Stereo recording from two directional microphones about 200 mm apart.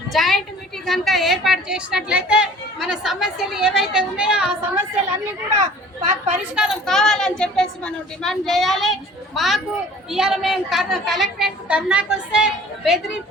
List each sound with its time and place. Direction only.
0.1 s a woman's voice: centre (ahead or behind)
5.5 s speech: 35° right (ahead or behind)
6.6 s a woman's voice: centre (ahead or behind)